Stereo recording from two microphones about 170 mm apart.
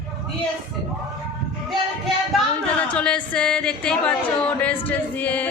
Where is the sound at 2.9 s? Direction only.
5° left (ahead or behind).